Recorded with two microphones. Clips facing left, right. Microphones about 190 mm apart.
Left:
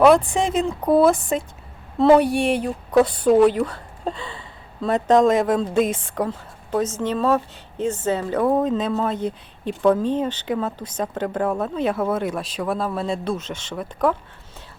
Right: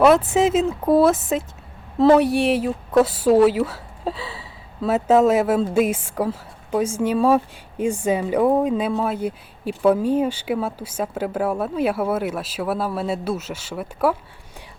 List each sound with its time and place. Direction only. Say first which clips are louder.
0.0 s a woman's voice: even; 5° right (ahead or behind)